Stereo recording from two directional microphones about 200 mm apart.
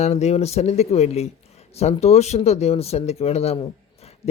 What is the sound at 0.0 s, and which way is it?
Speech, 35° left (ahead or behind).